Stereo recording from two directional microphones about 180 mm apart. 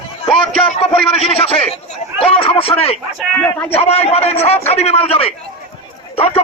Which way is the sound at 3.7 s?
35° left (ahead or behind).